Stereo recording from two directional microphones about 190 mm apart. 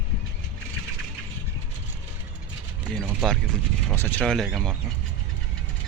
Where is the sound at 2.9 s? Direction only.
Centre (ahead or behind).